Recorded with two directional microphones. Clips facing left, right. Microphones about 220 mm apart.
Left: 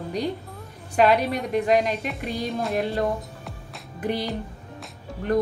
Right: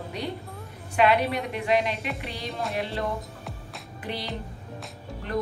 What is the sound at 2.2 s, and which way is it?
A woman's voice, 45° left (ahead or behind).